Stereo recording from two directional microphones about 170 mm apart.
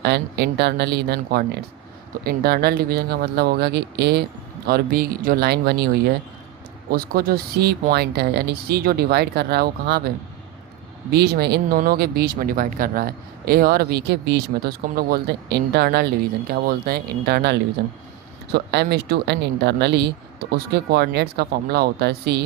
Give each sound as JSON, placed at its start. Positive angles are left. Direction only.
{"t": 0.0, "sound": "speech", "side_deg": -80}
{"t": 4.6, "sound": "speech", "side_deg": -65}
{"t": 6.9, "sound": "speech", "side_deg": -60}
{"t": 11.1, "sound": "speech", "side_deg": -70}
{"t": 16.5, "sound": "speech", "side_deg": -60}